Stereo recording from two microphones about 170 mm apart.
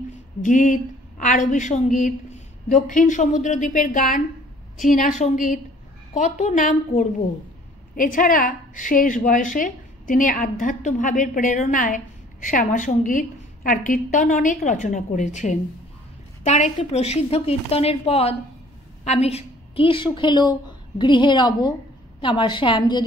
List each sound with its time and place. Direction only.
0.4 s a woman's voice: 50° left (ahead or behind); by 23.0 s 30° left (ahead or behind)